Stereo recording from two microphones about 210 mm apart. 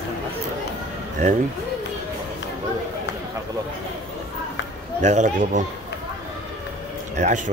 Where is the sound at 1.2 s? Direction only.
35° right (ahead or behind).